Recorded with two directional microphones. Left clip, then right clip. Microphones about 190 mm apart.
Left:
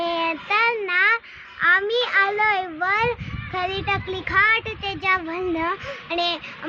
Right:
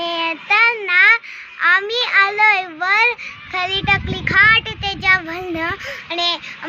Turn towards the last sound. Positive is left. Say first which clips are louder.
# right 4 dB
turn(degrees=25)  # may be behind; listen again after turning